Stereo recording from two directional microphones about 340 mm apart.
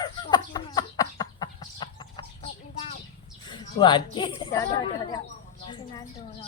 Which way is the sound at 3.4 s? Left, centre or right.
Centre.